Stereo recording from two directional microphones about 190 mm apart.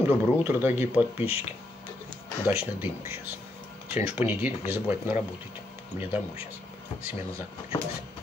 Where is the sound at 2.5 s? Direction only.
10° right (ahead or behind).